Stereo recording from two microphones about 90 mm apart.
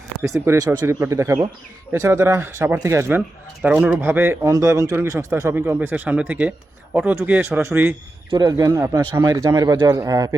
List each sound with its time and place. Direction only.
0.3 s speech: 35° right (ahead or behind)
0.9 s speech: 30° right (ahead or behind)
3.2 s speech: 15° right (ahead or behind)
4.4 s speech: 35° right (ahead or behind)
8.3 s speech: 50° right (ahead or behind)